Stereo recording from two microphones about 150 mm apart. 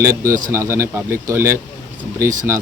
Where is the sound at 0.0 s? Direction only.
20° right (ahead or behind).